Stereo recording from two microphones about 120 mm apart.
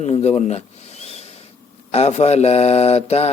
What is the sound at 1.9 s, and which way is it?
A man's voice, 60° left (ahead or behind).